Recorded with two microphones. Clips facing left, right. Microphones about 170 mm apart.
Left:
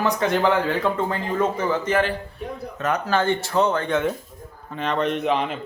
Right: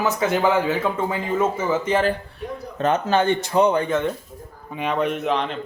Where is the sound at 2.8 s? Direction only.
25° right (ahead or behind).